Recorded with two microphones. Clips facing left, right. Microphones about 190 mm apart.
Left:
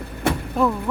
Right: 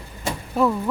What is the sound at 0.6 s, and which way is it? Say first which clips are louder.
Speech: right 2 dB; centre (ahead or behind).